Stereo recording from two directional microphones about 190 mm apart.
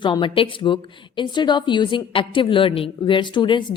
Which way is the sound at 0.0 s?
25° left (ahead or behind).